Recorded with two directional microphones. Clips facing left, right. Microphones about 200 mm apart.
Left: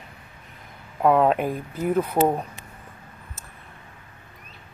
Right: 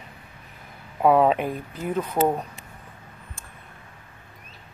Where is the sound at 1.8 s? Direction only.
10° left (ahead or behind).